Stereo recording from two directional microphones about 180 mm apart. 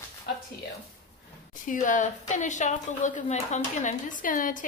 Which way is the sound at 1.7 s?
45° left (ahead or behind).